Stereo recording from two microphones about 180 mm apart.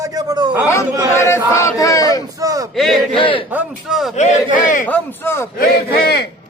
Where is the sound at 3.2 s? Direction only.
30° left (ahead or behind).